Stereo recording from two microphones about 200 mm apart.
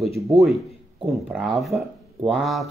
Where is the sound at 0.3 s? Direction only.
Centre (ahead or behind).